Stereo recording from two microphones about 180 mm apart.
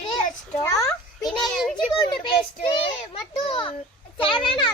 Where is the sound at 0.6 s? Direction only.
15° left (ahead or behind).